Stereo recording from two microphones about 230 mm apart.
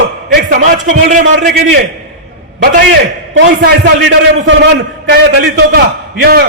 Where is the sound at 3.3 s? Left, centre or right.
Right.